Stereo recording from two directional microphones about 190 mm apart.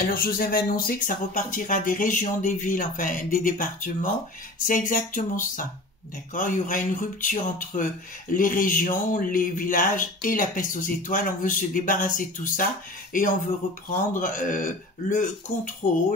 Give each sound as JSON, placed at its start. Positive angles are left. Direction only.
{"t": 0.0, "sound": "speech", "side_deg": 50}